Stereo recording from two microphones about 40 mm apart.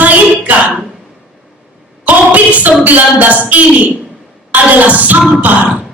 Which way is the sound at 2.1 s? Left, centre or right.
Right.